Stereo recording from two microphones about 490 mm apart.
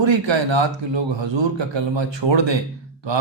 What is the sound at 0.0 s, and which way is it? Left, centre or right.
A man's voice, right.